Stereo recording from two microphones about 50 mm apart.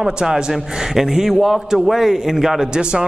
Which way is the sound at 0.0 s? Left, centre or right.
Centre.